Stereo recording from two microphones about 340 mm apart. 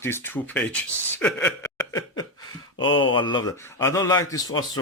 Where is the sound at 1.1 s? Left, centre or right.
Centre.